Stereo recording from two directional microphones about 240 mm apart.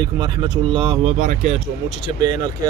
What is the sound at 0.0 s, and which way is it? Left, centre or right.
Speech, centre.